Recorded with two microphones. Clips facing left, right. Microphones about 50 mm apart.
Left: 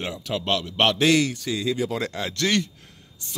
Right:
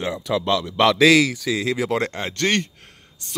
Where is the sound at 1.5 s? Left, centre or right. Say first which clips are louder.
Right 3 dB; right.